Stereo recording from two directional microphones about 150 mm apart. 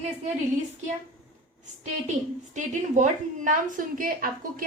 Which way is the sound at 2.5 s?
55° right (ahead or behind).